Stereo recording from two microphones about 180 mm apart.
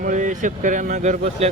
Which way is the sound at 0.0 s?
45° right (ahead or behind).